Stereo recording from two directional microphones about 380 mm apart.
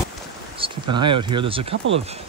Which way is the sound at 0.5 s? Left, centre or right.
Centre.